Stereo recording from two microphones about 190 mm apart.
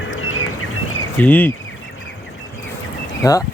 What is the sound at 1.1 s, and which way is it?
Speech, 10° left (ahead or behind).